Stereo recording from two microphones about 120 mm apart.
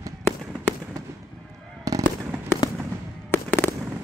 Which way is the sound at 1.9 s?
30° right (ahead or behind).